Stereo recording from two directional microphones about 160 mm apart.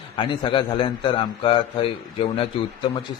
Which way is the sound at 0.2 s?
30° left (ahead or behind).